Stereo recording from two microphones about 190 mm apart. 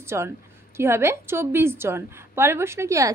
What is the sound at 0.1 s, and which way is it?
A woman's voice, 15° right (ahead or behind).